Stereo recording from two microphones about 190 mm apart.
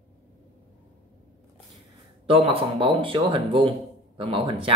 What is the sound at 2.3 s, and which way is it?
A man's voice, 30° right (ahead or behind).